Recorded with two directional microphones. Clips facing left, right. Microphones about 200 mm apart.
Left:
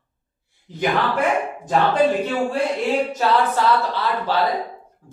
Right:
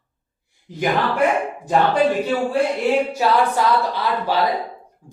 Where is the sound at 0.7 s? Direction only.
10° right (ahead or behind).